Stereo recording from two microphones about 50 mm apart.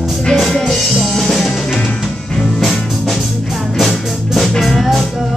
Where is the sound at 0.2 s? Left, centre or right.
Centre.